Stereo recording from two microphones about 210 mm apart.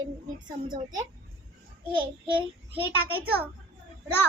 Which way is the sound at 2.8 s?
10° right (ahead or behind).